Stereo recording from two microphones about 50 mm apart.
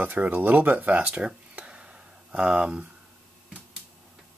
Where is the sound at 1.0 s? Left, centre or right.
Right.